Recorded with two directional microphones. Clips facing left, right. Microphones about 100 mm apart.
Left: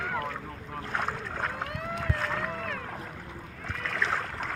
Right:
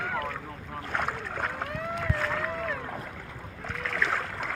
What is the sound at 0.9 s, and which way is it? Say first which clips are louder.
Boat: right 1 dB; 15° right (ahead or behind).